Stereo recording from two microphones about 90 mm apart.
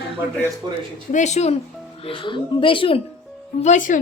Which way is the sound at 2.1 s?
65° left (ahead or behind).